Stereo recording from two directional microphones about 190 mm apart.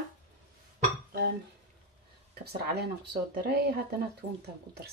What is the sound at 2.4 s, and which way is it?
Speech, 55° right (ahead or behind).